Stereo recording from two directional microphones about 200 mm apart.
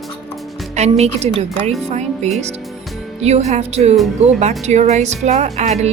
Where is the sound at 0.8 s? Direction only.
30° right (ahead or behind).